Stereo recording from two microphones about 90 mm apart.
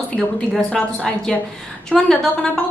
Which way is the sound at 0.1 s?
15° left (ahead or behind).